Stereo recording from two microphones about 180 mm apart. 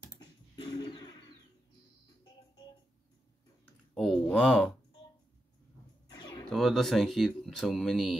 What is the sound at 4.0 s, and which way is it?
Speech, 5° left (ahead or behind).